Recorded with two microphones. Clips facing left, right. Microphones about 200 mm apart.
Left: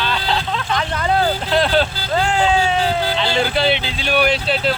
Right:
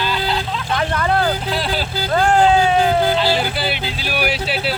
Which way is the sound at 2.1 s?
55° right (ahead or behind).